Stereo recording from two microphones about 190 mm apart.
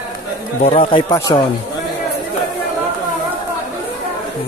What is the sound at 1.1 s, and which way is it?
Speech, 20° left (ahead or behind).